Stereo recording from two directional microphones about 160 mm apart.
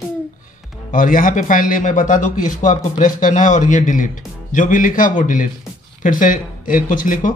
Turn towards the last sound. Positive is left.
turn(degrees=55)  # may be behind; listen again after turning